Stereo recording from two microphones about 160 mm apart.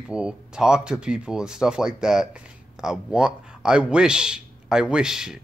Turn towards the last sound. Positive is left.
turn(degrees=-5)  # may be behind; listen again after turning